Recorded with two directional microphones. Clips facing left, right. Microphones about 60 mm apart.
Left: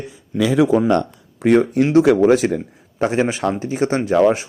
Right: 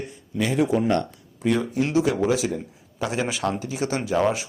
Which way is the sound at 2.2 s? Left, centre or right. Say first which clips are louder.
Left 8 dB; left.